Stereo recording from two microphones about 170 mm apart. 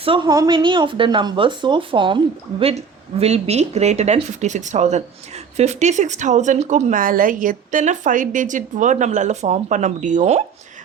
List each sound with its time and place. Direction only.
0.0 s speech: 30° right (ahead or behind)